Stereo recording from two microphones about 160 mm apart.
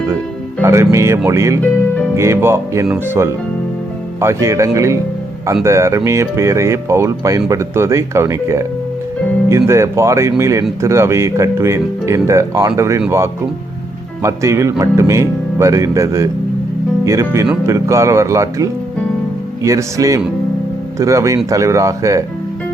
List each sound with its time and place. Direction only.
0.6 s speech: 20° right (ahead or behind)
4.2 s speech: 15° right (ahead or behind)